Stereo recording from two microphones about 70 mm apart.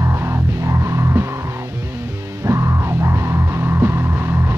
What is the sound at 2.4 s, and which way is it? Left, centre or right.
Music, right.